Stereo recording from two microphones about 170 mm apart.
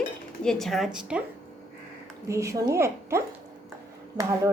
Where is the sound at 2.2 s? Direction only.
15° right (ahead or behind).